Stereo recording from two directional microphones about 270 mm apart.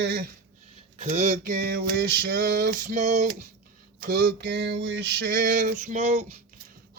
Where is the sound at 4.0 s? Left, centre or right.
Right.